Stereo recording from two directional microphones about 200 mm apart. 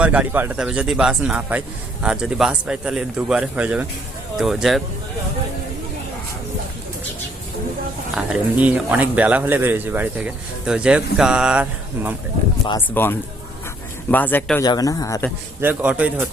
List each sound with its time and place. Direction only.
0.0 s a man's voice: 5° right (ahead or behind)
8.1 s speech: 5° right (ahead or behind)
12.9 s speech: 10° left (ahead or behind)
15.6 s speech: 5° right (ahead or behind)